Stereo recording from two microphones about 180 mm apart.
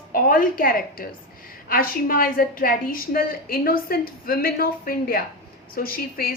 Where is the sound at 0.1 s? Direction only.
50° left (ahead or behind).